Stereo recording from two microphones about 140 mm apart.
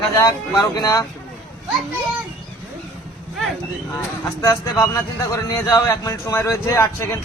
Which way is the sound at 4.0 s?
20° left (ahead or behind).